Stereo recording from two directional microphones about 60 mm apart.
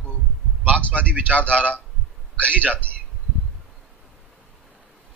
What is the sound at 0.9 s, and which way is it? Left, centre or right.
Speech, right.